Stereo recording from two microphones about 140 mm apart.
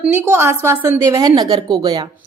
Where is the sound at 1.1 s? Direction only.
30° right (ahead or behind).